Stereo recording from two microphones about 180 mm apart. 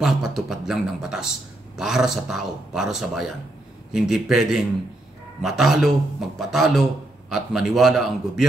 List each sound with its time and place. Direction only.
0.0 s a man's voice: 5° right (ahead or behind)